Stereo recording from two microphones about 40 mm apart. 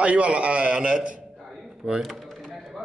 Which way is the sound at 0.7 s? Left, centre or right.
Centre.